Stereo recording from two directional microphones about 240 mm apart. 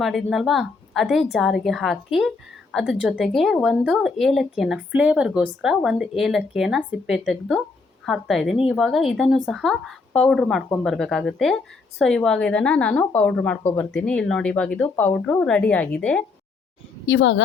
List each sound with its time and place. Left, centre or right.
0.0 s speech: centre
17.1 s speech: left